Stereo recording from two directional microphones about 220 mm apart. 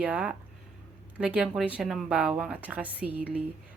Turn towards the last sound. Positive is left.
turn(degrees=-5)  # may be behind; listen again after turning